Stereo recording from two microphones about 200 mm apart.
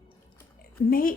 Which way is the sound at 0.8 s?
45° left (ahead or behind).